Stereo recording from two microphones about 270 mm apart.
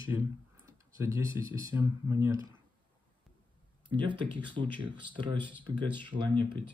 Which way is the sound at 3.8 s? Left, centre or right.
Centre.